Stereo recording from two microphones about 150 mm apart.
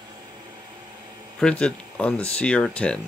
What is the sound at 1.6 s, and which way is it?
Speech, 5° left (ahead or behind).